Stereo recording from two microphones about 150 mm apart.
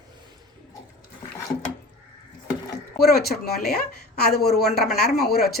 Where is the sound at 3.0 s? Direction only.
90° left.